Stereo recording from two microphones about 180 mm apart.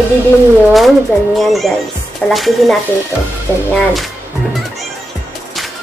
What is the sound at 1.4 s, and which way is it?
Speech, centre (ahead or behind).